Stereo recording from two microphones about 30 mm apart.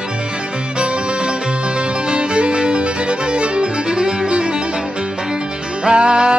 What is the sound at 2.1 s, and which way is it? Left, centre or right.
Music, right.